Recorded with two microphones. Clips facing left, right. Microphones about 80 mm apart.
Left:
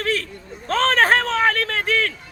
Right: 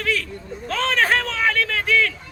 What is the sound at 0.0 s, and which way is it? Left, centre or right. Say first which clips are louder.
A man's voice: left 1 dB; left.